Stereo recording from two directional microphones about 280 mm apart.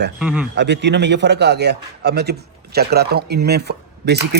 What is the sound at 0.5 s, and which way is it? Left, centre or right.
A man's voice, right.